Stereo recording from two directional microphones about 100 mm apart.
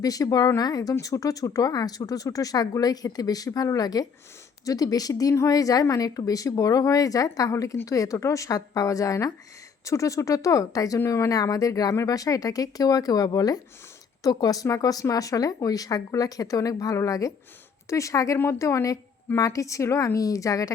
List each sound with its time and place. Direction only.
0.0 s speech: 35° left (ahead or behind)